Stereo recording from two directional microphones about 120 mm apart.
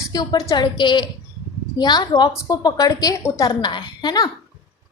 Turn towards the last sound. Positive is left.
turn(degrees=35)  # may be behind; listen again after turning